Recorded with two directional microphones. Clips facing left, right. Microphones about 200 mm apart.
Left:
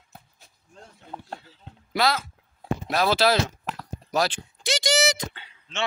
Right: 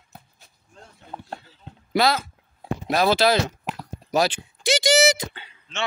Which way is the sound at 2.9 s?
Centre (ahead or behind).